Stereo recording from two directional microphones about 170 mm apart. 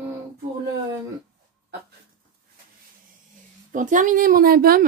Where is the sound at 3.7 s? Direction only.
50° right (ahead or behind).